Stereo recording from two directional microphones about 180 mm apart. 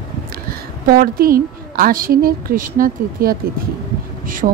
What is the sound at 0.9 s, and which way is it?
A woman's voice, 55° right (ahead or behind).